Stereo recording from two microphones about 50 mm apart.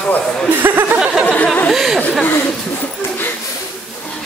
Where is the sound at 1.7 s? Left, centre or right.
Centre.